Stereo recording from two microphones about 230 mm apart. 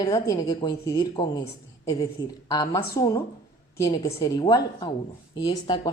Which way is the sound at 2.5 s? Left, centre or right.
Centre.